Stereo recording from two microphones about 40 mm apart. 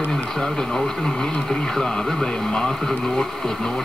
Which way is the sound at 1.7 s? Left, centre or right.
Centre.